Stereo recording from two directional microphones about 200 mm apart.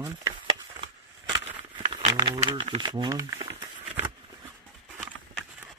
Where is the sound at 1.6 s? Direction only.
30° right (ahead or behind).